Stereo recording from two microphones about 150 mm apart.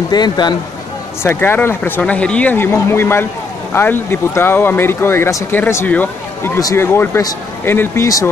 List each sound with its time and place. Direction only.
0.1 s speech: 30° left (ahead or behind)
1.2 s speech: 15° left (ahead or behind)